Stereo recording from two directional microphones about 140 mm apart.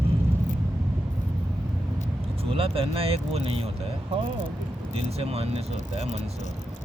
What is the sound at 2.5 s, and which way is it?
Speech, 40° right (ahead or behind).